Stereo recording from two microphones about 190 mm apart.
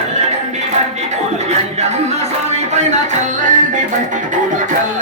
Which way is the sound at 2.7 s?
40° right (ahead or behind).